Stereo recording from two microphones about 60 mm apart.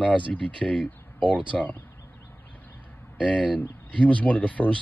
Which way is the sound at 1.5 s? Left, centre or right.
Centre.